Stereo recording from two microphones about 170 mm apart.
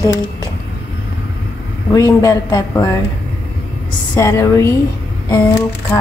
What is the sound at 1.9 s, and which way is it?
Speech, 20° left (ahead or behind).